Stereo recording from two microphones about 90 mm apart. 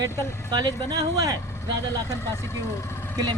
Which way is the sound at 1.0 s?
40° right (ahead or behind).